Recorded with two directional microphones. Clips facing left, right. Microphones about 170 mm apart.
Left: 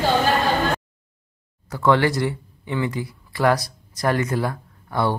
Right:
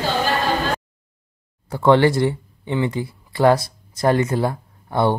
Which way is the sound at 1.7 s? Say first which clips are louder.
Right 4 dB; 30° right (ahead or behind).